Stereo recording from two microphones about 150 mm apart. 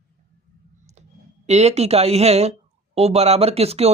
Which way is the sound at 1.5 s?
45° right (ahead or behind).